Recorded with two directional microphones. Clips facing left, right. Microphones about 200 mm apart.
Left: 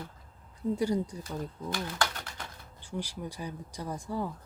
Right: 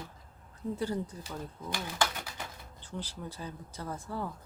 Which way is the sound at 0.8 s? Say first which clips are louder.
Left 4 dB; 15° left (ahead or behind).